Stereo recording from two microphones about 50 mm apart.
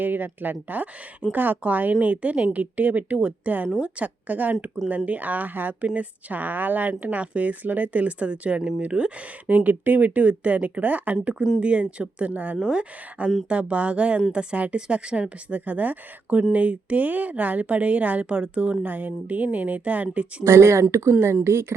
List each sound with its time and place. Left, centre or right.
0.0 s a woman's voice: right
20.4 s speech: right